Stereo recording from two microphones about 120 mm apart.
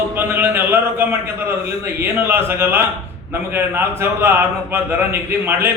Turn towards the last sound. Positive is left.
turn(degrees=-20)  # may be behind; listen again after turning